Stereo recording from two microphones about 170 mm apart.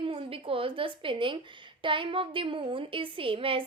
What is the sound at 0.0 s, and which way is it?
A woman's voice, 35° right (ahead or behind).